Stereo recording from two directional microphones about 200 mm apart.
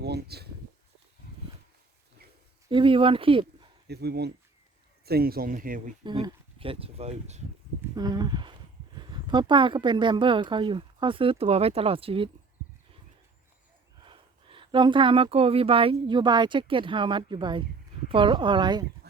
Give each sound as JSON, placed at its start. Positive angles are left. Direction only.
{"t": 0.0, "sound": "speech", "side_deg": -55}
{"t": 2.6, "sound": "speech", "side_deg": -25}
{"t": 3.8, "sound": "speech", "side_deg": -55}
{"t": 6.0, "sound": "speech", "side_deg": -25}
{"t": 7.8, "sound": "speech", "side_deg": -20}
{"t": 14.0, "sound": "speech", "side_deg": -25}